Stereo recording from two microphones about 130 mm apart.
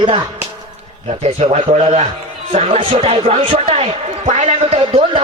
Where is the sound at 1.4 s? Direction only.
55° right (ahead or behind).